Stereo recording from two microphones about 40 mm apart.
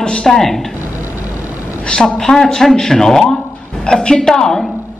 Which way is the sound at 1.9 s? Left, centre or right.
Left.